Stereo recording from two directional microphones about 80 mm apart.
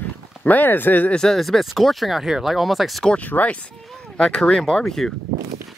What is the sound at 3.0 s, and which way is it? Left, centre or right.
Speech, centre.